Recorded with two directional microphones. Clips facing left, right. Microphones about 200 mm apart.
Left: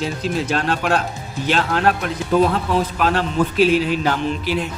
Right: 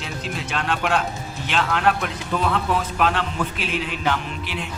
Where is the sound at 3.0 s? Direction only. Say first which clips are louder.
Left 4 dB; 40° left (ahead or behind).